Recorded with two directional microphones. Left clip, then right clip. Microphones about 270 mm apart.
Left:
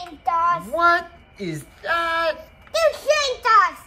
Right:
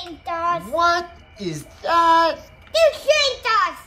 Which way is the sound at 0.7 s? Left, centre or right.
Centre.